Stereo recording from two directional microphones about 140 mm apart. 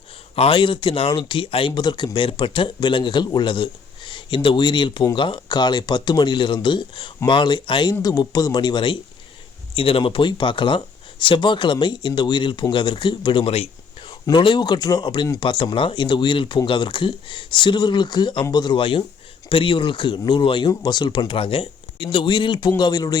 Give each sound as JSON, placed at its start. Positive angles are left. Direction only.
{"t": 0.3, "sound": "speech", "side_deg": 40}
{"t": 14.1, "sound": "speech", "side_deg": 30}